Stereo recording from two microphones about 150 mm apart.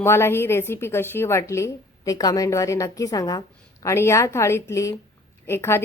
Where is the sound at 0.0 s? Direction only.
15° left (ahead or behind).